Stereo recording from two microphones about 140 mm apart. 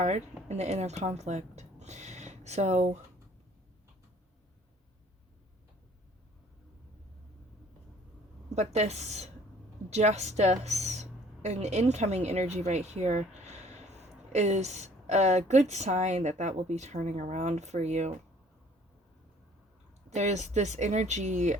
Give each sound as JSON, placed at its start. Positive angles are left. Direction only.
{"t": 0.4, "sound": "speech", "side_deg": -50}
{"t": 8.4, "sound": "a woman's voice", "side_deg": -55}
{"t": 20.1, "sound": "speech", "side_deg": -55}